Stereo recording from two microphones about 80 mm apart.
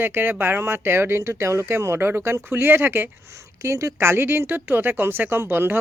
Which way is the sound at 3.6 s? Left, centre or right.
Right.